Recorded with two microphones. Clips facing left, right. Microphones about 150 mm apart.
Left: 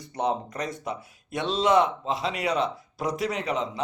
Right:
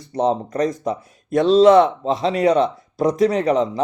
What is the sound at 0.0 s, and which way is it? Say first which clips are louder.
Speech: right 8 dB; 35° right (ahead or behind).